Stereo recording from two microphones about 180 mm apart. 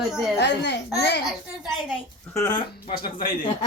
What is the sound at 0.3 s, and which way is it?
Speech, 70° left (ahead or behind).